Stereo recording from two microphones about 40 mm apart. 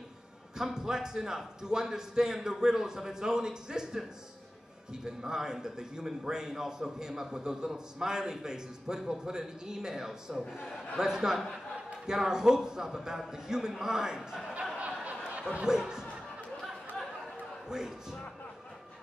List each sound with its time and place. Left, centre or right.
0.6 s a man's voice: centre
5.0 s a man's voice: centre
14.8 s a sound: right
15.7 s a man's voice: centre
16.6 s a sound: centre
17.6 s a man's voice: centre